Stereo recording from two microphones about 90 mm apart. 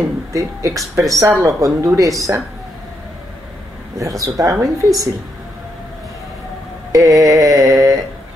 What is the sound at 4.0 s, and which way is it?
Speech, 35° right (ahead or behind).